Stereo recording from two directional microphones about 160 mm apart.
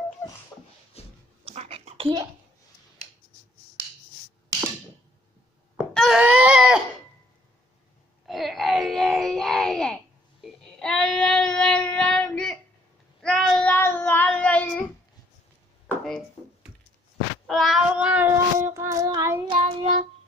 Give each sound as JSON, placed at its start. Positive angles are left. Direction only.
{"t": 0.2, "sound": "a sound", "side_deg": 15}
{"t": 1.0, "sound": "a sound", "side_deg": 40}
{"t": 1.4, "sound": "a sound", "side_deg": -40}
{"t": 5.8, "sound": "wail", "side_deg": -5}
{"t": 8.3, "sound": "wail", "side_deg": 0}
{"t": 10.4, "sound": "child singing", "side_deg": 5}
{"t": 13.2, "sound": "cat", "side_deg": 5}
{"t": 17.5, "sound": "child singing", "side_deg": 0}
{"t": 19.5, "sound": "child singing", "side_deg": -35}